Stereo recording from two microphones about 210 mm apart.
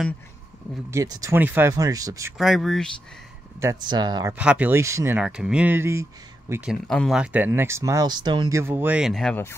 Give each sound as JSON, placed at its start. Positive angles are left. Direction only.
{"t": 0.8, "sound": "speech", "side_deg": -15}
{"t": 2.3, "sound": "speech", "side_deg": 0}
{"t": 3.6, "sound": "speech", "side_deg": -20}
{"t": 4.4, "sound": "speech", "side_deg": -5}